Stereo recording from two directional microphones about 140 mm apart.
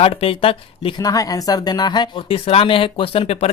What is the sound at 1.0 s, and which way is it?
Speech, 25° left (ahead or behind).